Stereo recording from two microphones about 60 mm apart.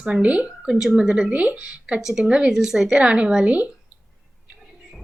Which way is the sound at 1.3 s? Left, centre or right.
Right.